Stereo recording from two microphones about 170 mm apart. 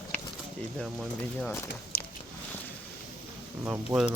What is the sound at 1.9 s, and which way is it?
Biting, 60° left (ahead or behind).